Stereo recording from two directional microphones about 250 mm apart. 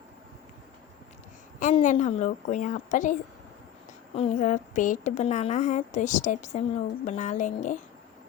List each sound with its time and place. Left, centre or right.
1.5 s a woman's voice: left